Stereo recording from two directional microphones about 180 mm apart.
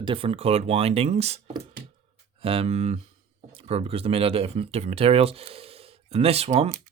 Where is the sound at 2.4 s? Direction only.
30° right (ahead or behind).